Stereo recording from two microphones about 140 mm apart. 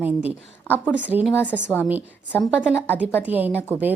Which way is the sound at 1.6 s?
15° left (ahead or behind).